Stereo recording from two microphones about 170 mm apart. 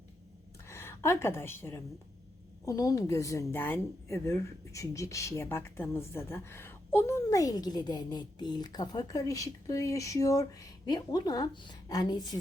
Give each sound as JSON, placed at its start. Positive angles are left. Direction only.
{"t": 0.7, "sound": "a woman's voice", "side_deg": 15}